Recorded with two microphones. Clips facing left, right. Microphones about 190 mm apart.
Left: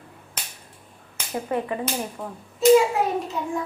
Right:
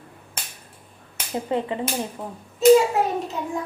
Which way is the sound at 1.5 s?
20° right (ahead or behind).